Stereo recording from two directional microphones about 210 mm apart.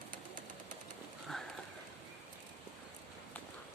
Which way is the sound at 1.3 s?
Centre (ahead or behind).